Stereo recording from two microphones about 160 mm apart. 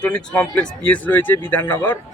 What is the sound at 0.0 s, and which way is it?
Speech, 10° left (ahead or behind).